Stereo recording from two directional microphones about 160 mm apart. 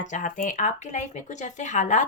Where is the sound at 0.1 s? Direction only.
55° left (ahead or behind).